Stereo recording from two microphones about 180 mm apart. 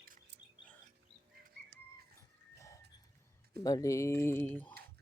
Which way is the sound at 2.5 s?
15° left (ahead or behind).